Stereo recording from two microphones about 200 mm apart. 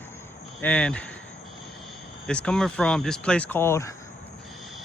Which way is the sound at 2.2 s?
5° left (ahead or behind).